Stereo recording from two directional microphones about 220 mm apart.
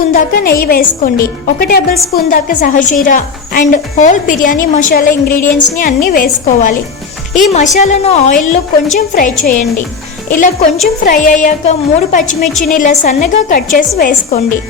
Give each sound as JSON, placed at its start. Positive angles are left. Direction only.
{"t": 0.1, "sound": "a woman's voice", "side_deg": 40}